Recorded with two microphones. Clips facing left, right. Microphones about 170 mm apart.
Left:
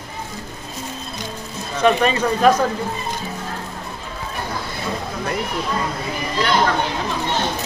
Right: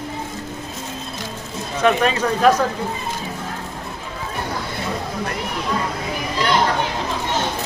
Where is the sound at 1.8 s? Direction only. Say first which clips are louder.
Left 1 dB; centre (ahead or behind).